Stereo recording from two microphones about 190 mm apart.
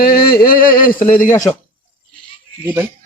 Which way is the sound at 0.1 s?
50° left (ahead or behind).